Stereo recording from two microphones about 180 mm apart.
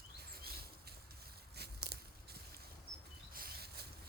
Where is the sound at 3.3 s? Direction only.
55° right (ahead or behind).